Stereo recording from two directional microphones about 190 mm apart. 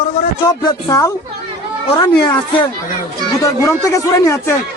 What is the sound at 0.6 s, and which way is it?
Speech, 20° left (ahead or behind).